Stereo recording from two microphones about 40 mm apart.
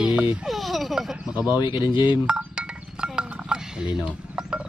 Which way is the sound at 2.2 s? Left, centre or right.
Right.